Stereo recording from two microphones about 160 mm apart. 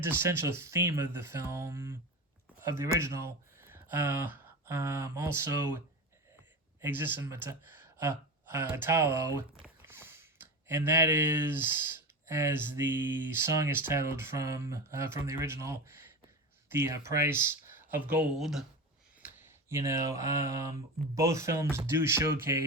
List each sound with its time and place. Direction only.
0.0 s speech: 15° right (ahead or behind)
6.8 s speech: 15° right (ahead or behind)
19.2 s speech: 15° right (ahead or behind)